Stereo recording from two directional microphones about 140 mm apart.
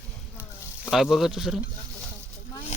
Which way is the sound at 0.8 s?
Centre (ahead or behind).